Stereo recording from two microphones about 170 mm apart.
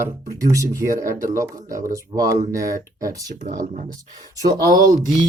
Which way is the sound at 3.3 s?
50° right (ahead or behind).